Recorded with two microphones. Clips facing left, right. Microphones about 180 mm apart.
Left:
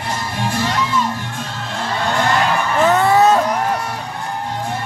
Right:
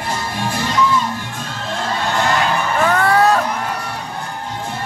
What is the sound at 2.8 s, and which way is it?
Music, 20° left (ahead or behind).